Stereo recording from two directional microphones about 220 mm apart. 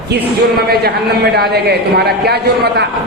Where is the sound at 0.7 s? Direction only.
45° right (ahead or behind).